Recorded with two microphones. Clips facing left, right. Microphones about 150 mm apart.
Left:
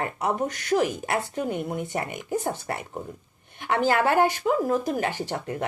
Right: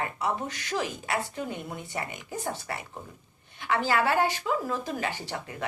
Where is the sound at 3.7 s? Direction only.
50° left (ahead or behind).